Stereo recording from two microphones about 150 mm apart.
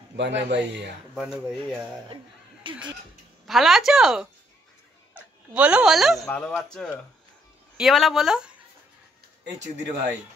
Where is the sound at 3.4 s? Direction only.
Centre (ahead or behind).